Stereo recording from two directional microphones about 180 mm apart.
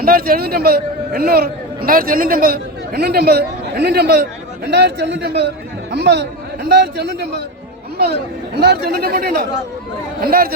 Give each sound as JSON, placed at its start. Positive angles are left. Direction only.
{"t": 0.0, "sound": "a man's voice", "side_deg": -55}